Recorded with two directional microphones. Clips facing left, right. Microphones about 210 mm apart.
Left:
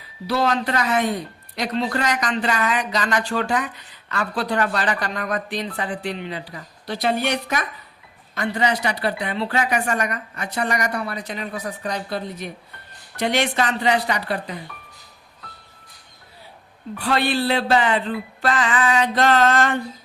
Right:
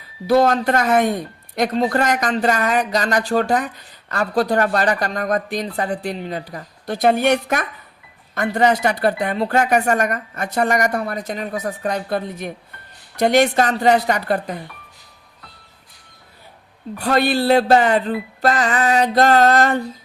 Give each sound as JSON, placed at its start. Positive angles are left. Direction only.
{"t": 0.3, "sound": "a woman's voice", "side_deg": -45}
{"t": 17.0, "sound": "speech", "side_deg": -40}